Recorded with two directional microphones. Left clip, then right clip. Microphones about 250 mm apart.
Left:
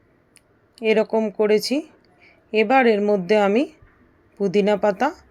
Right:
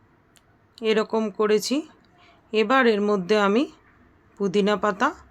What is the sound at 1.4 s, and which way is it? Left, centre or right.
Speech, centre.